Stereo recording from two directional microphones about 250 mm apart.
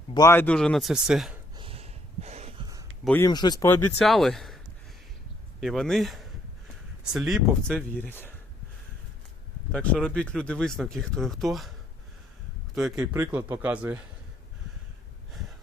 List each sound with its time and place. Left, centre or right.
0.1 s speech: centre
1.5 s snort: right
3.0 s speech: centre
9.7 s speech: centre
12.7 s speech: centre